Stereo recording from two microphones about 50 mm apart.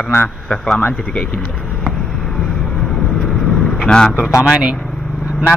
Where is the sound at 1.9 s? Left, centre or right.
Centre.